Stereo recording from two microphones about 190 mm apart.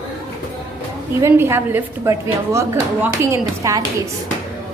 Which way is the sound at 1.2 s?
10° right (ahead or behind).